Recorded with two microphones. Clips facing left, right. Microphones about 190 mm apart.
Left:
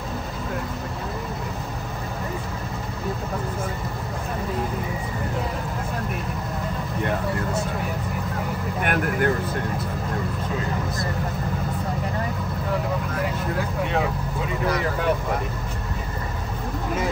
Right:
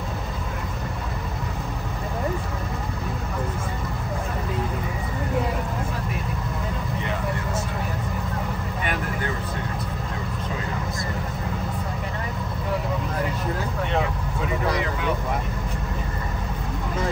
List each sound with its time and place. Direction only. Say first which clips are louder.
8.8 s vehicle: left 7 dB; 60° left (ahead or behind)